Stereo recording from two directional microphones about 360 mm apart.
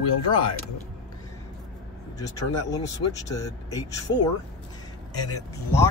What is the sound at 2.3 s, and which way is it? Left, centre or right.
Speech, centre.